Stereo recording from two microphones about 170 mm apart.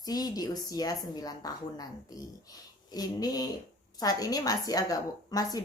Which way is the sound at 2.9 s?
20° left (ahead or behind).